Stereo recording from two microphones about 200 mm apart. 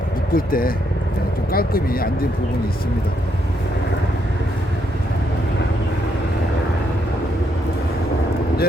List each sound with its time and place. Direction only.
0.3 s speech: 45° left (ahead or behind)